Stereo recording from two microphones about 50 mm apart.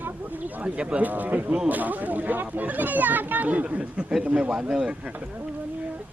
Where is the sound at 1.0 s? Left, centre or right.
Right.